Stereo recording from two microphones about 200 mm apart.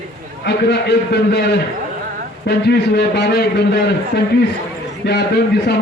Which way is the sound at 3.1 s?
55° left (ahead or behind).